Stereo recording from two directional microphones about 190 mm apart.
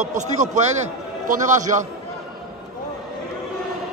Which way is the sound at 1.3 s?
40° right (ahead or behind).